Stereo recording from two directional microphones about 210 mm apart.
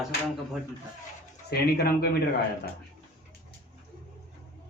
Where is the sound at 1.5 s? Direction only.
50° left (ahead or behind).